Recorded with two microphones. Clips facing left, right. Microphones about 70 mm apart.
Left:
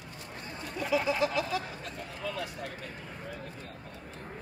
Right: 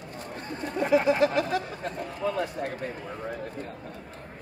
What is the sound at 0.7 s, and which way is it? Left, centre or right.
Speech, right.